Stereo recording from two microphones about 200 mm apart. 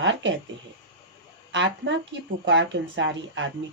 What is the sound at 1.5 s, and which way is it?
A woman's voice, 65° right (ahead or behind).